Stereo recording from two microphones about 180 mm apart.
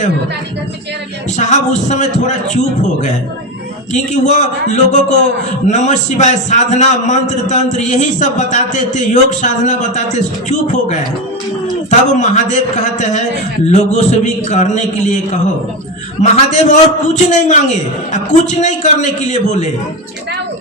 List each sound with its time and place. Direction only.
1.4 s a man's voice: 40° left (ahead or behind)